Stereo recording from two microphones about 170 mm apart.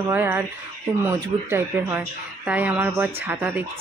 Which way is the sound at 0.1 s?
10° right (ahead or behind).